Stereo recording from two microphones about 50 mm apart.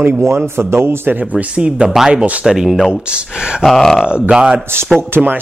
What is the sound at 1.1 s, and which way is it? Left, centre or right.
Speech, right.